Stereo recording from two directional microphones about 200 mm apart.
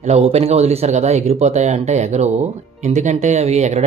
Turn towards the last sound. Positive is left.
turn(degrees=-35)  # may be behind; listen again after turning